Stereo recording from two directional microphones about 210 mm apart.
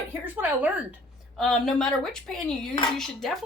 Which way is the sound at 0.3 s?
10° right (ahead or behind).